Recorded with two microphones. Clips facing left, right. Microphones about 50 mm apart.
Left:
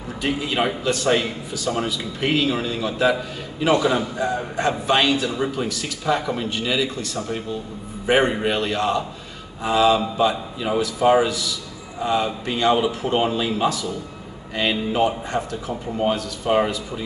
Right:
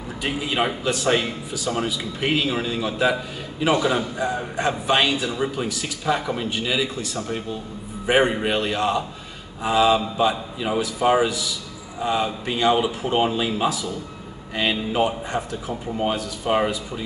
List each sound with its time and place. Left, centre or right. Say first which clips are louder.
0.2 s a man's voice: left 1 dB; centre
8.1 s a man's voice: even; centre